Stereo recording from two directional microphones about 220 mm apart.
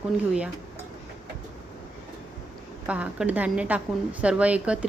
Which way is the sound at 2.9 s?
5° right (ahead or behind).